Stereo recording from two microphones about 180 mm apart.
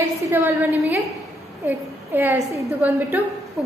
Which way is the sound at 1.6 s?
10° right (ahead or behind).